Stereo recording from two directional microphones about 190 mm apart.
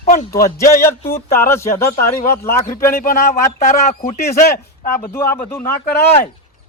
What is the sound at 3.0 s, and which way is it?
Speech, 50° left (ahead or behind).